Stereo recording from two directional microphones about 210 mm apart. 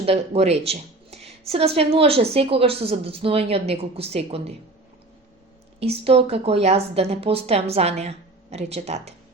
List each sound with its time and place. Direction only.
0.0 s speech: 30° right (ahead or behind)
5.8 s speech: 30° right (ahead or behind)